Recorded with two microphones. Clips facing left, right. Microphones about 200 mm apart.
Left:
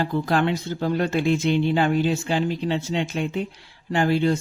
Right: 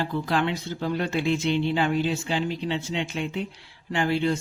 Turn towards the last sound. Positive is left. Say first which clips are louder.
# left 4 dB
turn(degrees=40)  # may be behind; listen again after turning